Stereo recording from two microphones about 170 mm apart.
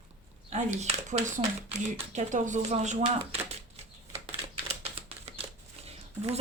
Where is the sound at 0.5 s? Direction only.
40° right (ahead or behind).